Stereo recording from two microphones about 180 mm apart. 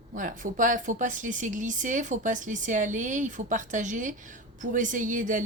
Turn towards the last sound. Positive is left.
turn(degrees=-45)  # may be behind; listen again after turning